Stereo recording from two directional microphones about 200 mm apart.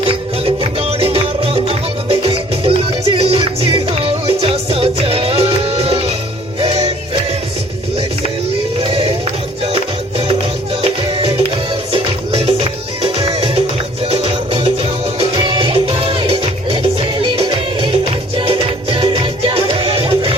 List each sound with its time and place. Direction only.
0.0 s music: 30° right (ahead or behind)
8.9 s music: 30° right (ahead or behind)
11.9 s music: 30° right (ahead or behind)